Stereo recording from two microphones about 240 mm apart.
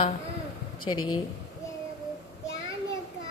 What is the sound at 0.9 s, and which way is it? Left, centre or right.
Speech, left.